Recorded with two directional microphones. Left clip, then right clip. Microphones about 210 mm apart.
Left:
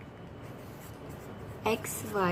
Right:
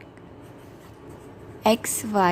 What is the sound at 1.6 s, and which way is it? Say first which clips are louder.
Speech: right 10 dB; 50° right (ahead or behind).